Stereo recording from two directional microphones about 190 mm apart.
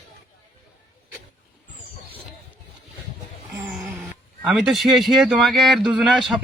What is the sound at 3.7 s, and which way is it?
Speech, centre (ahead or behind).